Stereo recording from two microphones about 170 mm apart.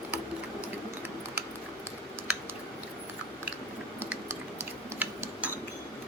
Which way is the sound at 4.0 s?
15° right (ahead or behind).